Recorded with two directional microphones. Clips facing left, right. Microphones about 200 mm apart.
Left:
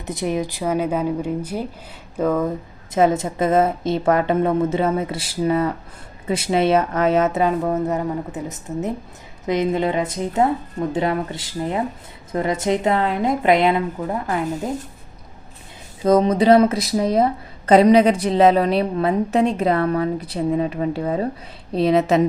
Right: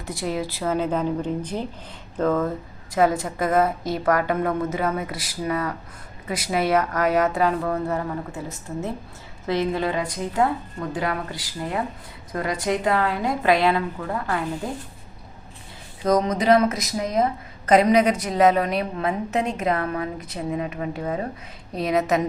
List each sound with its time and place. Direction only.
0.0 s speech: 20° left (ahead or behind)
2.9 s a woman's voice: 25° left (ahead or behind)
16.0 s a woman's voice: 30° left (ahead or behind)